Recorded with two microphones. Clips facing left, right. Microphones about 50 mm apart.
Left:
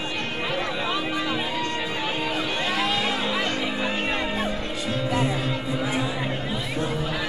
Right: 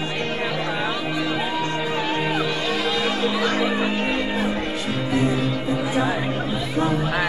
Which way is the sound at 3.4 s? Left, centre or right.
Right.